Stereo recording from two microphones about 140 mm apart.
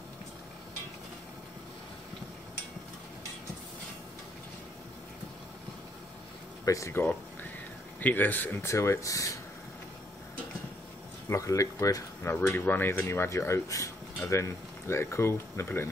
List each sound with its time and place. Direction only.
6.6 s speech: 20° left (ahead or behind)
11.2 s speech: 25° left (ahead or behind)